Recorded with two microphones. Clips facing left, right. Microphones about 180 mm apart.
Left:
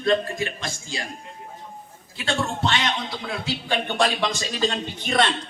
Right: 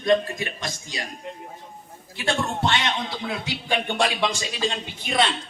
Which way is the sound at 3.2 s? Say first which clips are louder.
Even; 15° right (ahead or behind).